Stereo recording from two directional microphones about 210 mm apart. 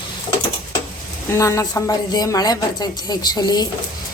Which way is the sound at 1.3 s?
15° left (ahead or behind).